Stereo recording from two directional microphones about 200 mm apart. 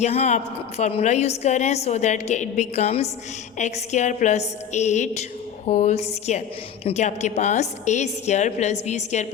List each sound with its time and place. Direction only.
0.0 s a woman's voice: 35° left (ahead or behind)